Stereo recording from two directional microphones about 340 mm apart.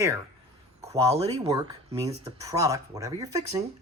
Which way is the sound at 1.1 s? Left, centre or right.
Centre.